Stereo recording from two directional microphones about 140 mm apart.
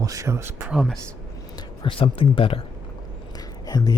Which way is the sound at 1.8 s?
40° left (ahead or behind).